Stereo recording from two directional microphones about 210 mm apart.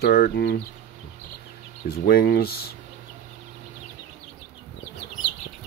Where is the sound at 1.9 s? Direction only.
45° left (ahead or behind).